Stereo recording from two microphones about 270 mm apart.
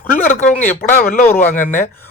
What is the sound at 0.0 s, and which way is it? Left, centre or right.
Speech, left.